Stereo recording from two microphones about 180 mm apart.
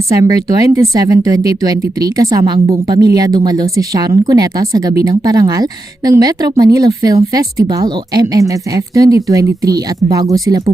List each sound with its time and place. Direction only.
0.1 s a woman's voice: 20° right (ahead or behind)